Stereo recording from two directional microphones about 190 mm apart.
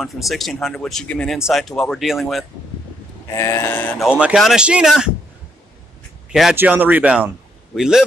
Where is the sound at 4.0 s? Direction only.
5° right (ahead or behind).